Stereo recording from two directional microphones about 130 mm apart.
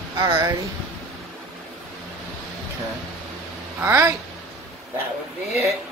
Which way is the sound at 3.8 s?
20° right (ahead or behind).